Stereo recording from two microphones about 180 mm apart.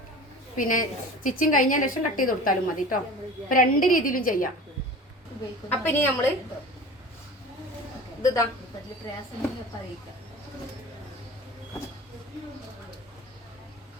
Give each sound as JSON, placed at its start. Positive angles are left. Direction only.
{"t": 0.5, "sound": "a woman's voice", "side_deg": 50}
{"t": 5.6, "sound": "a woman's voice", "side_deg": 10}
{"t": 8.2, "sound": "speech", "side_deg": 20}